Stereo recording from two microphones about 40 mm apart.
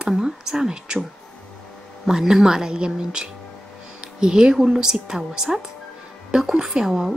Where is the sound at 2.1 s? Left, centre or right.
Centre.